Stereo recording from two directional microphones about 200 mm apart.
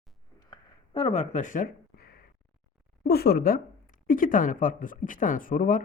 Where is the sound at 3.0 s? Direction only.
50° left (ahead or behind).